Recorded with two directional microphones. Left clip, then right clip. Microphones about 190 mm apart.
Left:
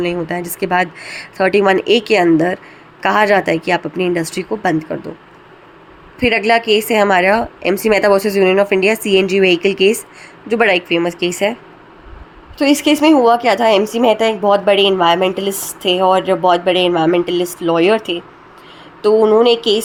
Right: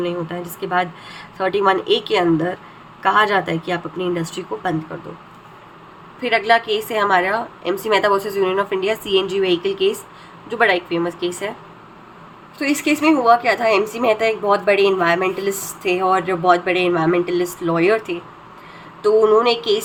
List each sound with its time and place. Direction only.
0.3 s a woman's voice: 40° left (ahead or behind)
6.1 s a woman's voice: 40° left (ahead or behind)
12.5 s a woman's voice: 30° left (ahead or behind)